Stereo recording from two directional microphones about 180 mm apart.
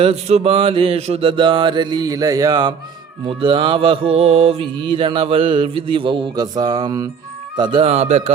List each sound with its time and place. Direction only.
0.0 s mantra: 35° right (ahead or behind)
7.5 s a man's voice: 25° right (ahead or behind)